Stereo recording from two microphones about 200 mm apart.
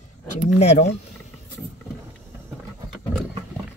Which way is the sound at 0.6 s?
30° left (ahead or behind).